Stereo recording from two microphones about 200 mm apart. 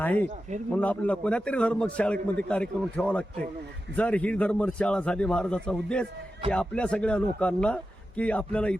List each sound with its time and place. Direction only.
0.0 s a man's voice: 10° left (ahead or behind)